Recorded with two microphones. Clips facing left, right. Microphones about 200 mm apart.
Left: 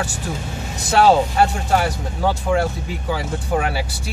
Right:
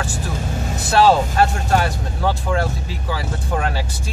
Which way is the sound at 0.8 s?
15° left (ahead or behind).